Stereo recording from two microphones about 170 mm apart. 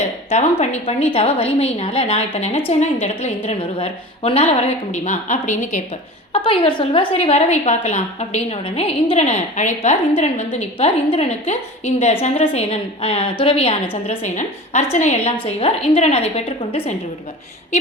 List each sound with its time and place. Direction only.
0.6 s a woman's voice: 40° left (ahead or behind)
6.3 s a woman's voice: 30° left (ahead or behind)